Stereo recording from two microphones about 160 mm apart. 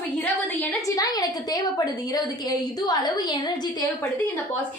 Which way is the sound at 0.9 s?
25° left (ahead or behind).